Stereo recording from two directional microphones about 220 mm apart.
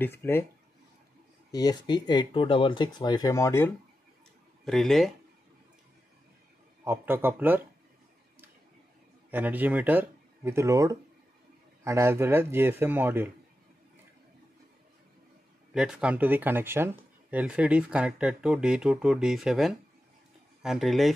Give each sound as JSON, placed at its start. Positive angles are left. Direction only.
{"t": 0.0, "sound": "speech", "side_deg": 10}
{"t": 1.5, "sound": "speech", "side_deg": 15}
{"t": 4.6, "sound": "speech", "side_deg": 0}
{"t": 6.8, "sound": "a man's voice", "side_deg": -10}
{"t": 9.3, "sound": "a man's voice", "side_deg": -10}
{"t": 15.7, "sound": "speech", "side_deg": -5}